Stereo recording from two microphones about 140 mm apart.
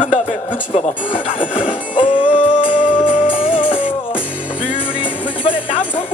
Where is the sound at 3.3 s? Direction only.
40° left (ahead or behind).